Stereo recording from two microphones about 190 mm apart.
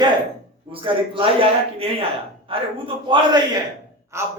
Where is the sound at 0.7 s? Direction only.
30° right (ahead or behind).